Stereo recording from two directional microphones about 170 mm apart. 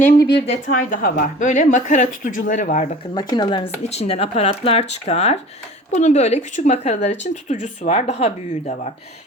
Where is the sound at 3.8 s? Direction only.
35° left (ahead or behind).